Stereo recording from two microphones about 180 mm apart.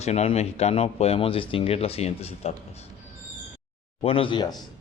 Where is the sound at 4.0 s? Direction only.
30° left (ahead or behind).